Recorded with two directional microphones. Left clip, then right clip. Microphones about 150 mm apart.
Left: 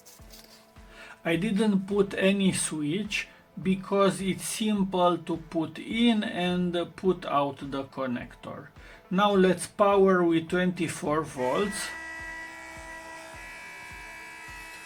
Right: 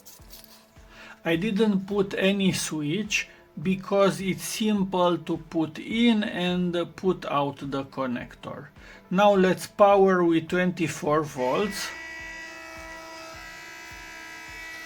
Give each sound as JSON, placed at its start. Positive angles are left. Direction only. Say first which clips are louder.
{"t": 1.2, "sound": "speech", "louder": "right 3 dB", "side_deg": -35}